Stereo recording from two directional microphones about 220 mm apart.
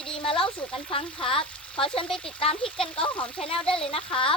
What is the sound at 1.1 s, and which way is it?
Speech, 25° left (ahead or behind).